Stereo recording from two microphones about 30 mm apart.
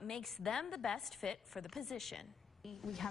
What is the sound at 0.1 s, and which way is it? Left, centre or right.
A woman's voice, centre.